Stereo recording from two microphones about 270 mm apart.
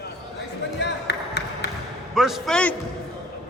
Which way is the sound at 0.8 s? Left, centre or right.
Left.